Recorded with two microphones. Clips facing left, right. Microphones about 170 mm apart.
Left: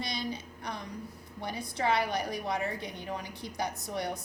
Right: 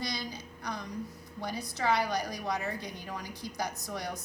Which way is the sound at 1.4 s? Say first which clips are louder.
Left 1 dB; 25° left (ahead or behind).